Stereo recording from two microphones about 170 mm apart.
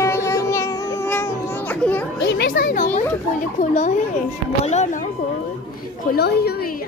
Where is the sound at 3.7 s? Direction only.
45° left (ahead or behind).